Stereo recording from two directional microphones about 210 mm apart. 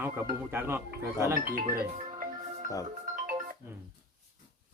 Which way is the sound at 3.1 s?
40° right (ahead or behind).